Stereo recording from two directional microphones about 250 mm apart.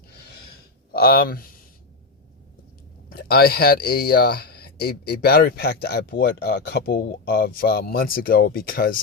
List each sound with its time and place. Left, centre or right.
0.9 s speech: left
3.1 s speech: left